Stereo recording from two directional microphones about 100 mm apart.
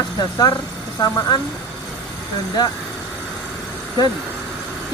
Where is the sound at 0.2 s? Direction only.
40° left (ahead or behind).